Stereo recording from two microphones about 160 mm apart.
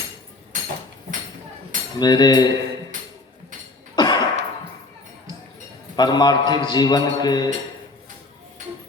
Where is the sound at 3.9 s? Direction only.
25° left (ahead or behind).